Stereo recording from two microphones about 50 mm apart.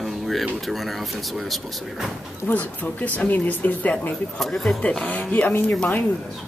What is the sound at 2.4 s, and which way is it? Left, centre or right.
Speech, left.